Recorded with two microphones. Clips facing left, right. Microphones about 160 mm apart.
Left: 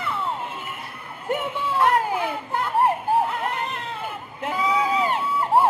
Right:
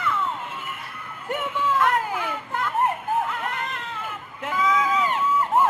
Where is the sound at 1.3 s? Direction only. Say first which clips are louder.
Even; 30° left (ahead or behind).